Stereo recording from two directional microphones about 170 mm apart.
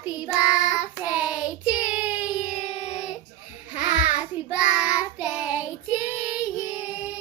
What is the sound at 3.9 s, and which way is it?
Child singing, 10° right (ahead or behind).